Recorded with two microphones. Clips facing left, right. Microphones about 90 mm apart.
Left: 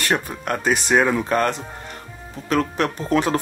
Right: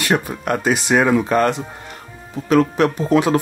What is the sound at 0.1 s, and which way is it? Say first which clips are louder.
Speech: right 5 dB; 45° right (ahead or behind).